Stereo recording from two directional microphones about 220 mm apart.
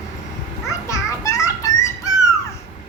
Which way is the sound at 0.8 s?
15° left (ahead or behind).